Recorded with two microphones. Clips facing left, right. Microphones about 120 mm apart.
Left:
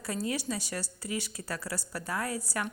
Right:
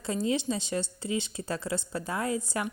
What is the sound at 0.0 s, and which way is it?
Speech, 25° right (ahead or behind).